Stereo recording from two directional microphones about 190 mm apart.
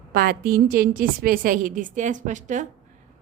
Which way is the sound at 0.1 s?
50° right (ahead or behind).